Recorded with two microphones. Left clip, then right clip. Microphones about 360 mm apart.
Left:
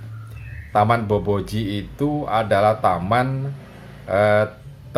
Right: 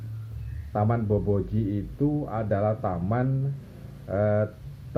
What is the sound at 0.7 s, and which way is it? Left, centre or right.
Speech, left.